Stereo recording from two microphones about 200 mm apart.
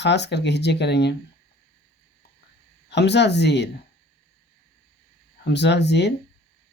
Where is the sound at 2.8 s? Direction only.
60° left (ahead or behind).